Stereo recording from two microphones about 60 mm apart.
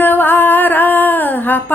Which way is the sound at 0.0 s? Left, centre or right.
Left.